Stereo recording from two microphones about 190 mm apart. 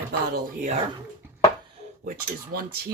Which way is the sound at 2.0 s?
50° right (ahead or behind).